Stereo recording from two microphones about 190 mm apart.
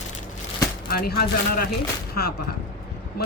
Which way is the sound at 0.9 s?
55° left (ahead or behind).